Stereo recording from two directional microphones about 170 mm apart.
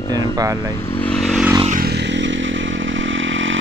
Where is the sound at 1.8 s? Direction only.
80° right.